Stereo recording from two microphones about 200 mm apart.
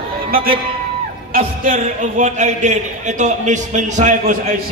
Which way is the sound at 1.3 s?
40° right (ahead or behind).